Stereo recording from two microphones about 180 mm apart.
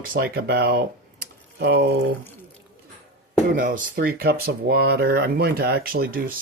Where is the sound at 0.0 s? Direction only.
55° right (ahead or behind).